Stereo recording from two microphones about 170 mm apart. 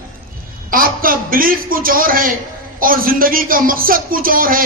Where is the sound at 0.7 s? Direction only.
55° right (ahead or behind).